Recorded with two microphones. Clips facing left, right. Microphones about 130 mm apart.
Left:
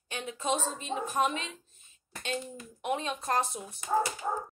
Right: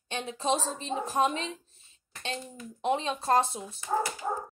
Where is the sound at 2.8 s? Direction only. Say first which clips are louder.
Right 4 dB; 30° right (ahead or behind).